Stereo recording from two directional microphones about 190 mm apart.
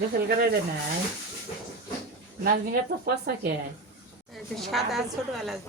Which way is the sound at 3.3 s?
55° right (ahead or behind).